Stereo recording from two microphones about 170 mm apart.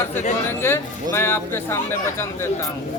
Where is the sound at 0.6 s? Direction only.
15° left (ahead or behind).